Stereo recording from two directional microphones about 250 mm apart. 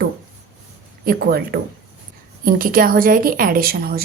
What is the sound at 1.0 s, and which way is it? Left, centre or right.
A woman's voice, right.